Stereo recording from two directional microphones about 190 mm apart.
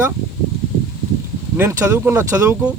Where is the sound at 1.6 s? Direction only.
15° right (ahead or behind).